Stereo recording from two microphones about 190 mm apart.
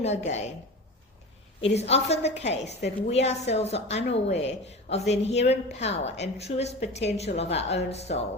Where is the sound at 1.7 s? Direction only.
35° left (ahead or behind).